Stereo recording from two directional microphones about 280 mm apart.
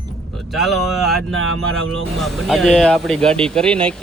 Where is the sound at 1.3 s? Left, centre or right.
Right.